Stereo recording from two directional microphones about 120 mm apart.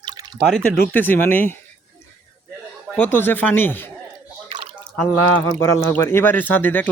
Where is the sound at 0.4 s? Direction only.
5° left (ahead or behind).